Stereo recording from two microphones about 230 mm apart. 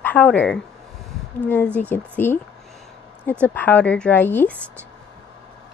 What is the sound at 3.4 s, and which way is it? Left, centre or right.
A woman's voice, centre.